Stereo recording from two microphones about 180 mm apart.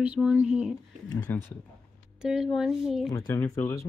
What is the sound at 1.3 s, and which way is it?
Speech, 10° left (ahead or behind).